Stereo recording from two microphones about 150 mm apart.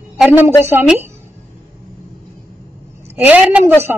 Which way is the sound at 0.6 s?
15° right (ahead or behind).